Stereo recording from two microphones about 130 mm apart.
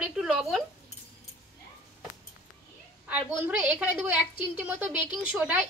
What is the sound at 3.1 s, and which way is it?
A woman's voice, 10° right (ahead or behind).